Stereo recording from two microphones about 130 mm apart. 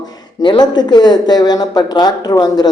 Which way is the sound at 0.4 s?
35° left (ahead or behind).